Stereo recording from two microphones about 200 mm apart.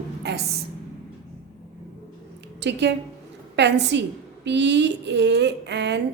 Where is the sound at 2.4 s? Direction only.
60° right (ahead or behind).